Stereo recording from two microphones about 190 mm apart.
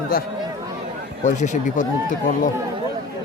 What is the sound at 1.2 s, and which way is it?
Speech, 40° left (ahead or behind).